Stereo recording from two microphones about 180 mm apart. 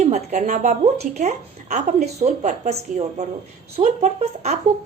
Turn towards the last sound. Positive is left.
turn(degrees=-40)  # may be behind; listen again after turning